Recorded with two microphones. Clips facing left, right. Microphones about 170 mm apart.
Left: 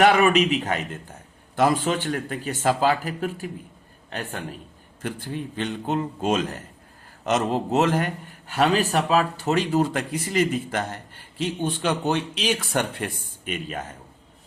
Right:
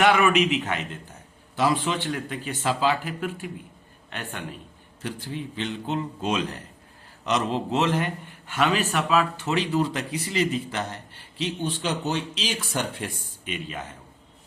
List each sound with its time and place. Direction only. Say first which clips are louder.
0.0 s a man's voice: left 2 dB; 35° left (ahead or behind)
5.0 s a man's voice: left 2 dB; 50° left (ahead or behind)